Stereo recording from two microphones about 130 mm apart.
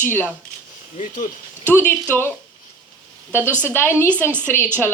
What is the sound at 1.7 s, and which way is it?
Speech, 10° left (ahead or behind).